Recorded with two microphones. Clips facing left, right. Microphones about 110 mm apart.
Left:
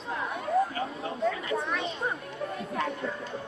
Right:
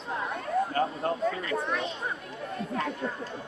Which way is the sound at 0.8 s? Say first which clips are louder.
Right 6 dB; 50° right (ahead or behind).